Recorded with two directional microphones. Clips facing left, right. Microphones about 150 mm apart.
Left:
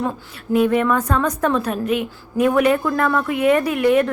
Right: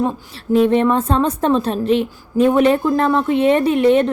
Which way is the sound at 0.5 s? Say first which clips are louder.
Right 3 dB; 30° right (ahead or behind).